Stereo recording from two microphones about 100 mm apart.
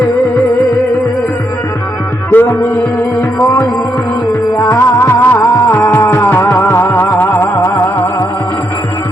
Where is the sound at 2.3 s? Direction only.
25° left (ahead or behind).